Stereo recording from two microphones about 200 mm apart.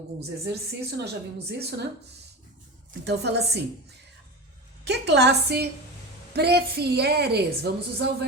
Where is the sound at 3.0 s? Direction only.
55° right (ahead or behind).